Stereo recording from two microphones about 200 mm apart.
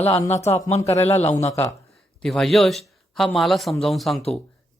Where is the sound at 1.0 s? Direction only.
35° left (ahead or behind).